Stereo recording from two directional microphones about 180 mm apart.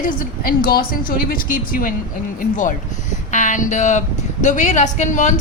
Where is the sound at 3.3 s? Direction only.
45° left (ahead or behind).